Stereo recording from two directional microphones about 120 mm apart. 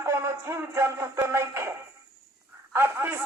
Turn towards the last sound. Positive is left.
turn(degrees=-20)  # may be behind; listen again after turning